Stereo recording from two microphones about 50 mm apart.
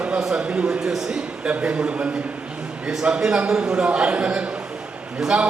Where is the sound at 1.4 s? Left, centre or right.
Right.